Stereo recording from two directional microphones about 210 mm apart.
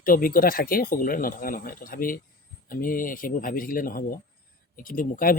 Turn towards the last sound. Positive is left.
turn(degrees=40)  # may be behind; listen again after turning